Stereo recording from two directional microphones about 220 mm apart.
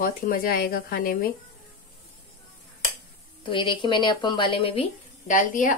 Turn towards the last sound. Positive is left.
turn(degrees=35)  # may be behind; listen again after turning